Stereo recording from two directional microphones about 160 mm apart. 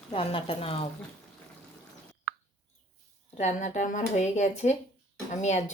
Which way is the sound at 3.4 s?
45° left (ahead or behind).